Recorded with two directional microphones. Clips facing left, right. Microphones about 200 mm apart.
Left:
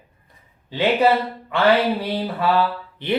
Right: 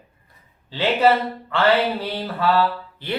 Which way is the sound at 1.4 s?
15° left (ahead or behind).